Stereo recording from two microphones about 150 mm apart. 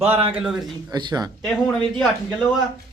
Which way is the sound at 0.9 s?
30° right (ahead or behind).